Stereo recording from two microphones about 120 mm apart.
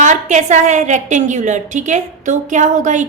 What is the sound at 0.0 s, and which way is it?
A woman's voice, 85° right.